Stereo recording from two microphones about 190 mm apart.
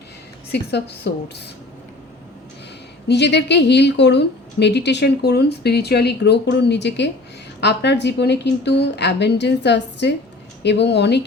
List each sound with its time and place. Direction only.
0.5 s a woman's voice: 60° left (ahead or behind)
3.1 s a woman's voice: 65° left (ahead or behind)